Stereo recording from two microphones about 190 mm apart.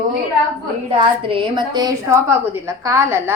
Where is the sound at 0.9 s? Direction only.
30° right (ahead or behind).